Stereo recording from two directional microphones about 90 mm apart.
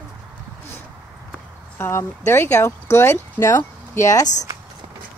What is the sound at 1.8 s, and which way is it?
Speech, 30° left (ahead or behind).